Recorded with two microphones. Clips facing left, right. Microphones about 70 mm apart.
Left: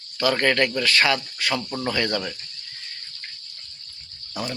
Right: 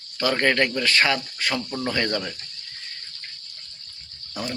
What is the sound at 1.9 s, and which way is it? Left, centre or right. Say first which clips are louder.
Speech: even; right.